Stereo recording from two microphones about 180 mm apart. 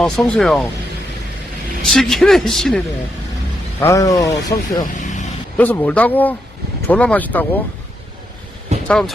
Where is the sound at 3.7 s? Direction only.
15° left (ahead or behind).